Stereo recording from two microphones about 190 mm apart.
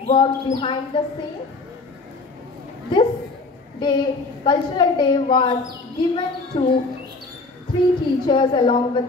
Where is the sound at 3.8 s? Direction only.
25° left (ahead or behind).